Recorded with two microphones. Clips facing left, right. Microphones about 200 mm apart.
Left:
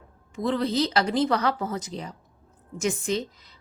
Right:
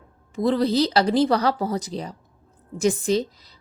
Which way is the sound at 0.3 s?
35° right (ahead or behind).